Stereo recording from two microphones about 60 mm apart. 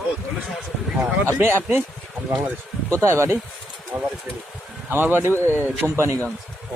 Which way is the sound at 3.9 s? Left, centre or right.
Right.